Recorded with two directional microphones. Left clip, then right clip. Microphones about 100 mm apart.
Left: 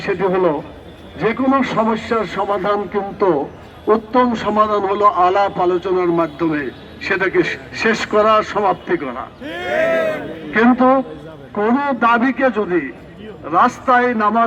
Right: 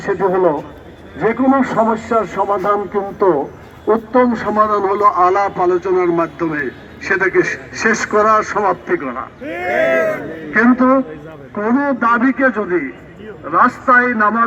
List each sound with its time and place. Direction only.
0.0 s a man's voice: 25° left (ahead or behind)
2.2 s a man's voice: 10° left (ahead or behind)
2.5 s a man's voice: 20° left (ahead or behind)
3.2 s a man's voice: 15° left (ahead or behind)
5.3 s a man's voice: 30° left (ahead or behind)
6.1 s a man's voice: 15° left (ahead or behind)
7.4 s a man's voice: 55° left (ahead or behind)
7.8 s a man's voice: 5° left (ahead or behind)
9.0 s a man's voice: 30° left (ahead or behind)